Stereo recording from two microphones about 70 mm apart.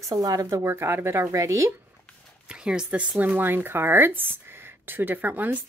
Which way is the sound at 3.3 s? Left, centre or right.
Right.